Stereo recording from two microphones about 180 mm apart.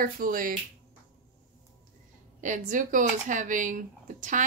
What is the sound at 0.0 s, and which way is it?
Speech, 50° right (ahead or behind).